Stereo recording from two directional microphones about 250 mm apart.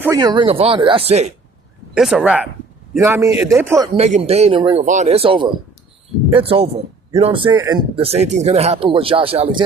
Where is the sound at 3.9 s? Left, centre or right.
Right.